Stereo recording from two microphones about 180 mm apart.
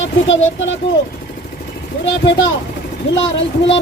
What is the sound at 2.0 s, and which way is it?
Speech, 90° left.